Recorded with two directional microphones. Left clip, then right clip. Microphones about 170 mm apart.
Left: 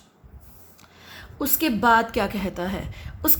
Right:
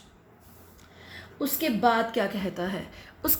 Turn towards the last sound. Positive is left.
turn(degrees=35)  # may be behind; listen again after turning